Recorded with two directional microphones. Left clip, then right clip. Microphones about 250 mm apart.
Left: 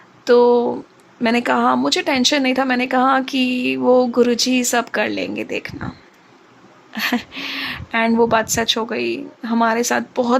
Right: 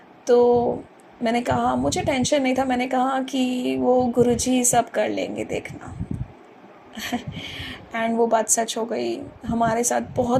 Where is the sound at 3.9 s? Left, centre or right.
Left.